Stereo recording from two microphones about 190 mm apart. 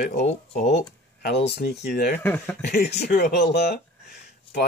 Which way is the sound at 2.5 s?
60° left (ahead or behind).